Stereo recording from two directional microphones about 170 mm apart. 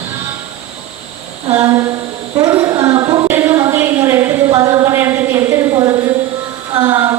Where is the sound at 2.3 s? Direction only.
20° right (ahead or behind).